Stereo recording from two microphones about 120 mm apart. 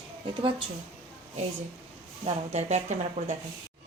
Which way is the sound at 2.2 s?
65° right (ahead or behind).